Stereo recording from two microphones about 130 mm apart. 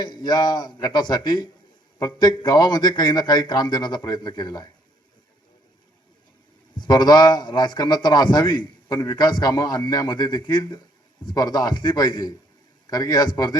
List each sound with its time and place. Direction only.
0.0 s a man's voice: 30° left (ahead or behind)
6.7 s a man's voice: 35° left (ahead or behind)